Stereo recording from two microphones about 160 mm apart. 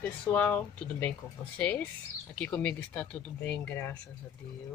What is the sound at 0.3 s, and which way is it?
Speech, 10° left (ahead or behind).